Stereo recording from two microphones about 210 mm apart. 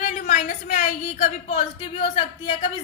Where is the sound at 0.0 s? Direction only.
35° left (ahead or behind).